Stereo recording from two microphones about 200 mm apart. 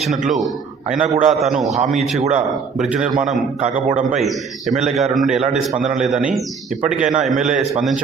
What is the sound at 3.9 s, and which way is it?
Speech, 40° right (ahead or behind).